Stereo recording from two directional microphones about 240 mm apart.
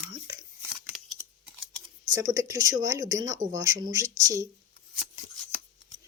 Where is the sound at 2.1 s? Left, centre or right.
Centre.